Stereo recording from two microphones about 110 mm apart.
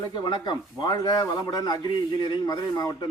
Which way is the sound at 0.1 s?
45° left (ahead or behind).